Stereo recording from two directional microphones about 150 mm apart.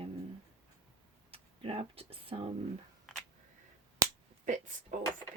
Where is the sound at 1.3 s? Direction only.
40° right (ahead or behind).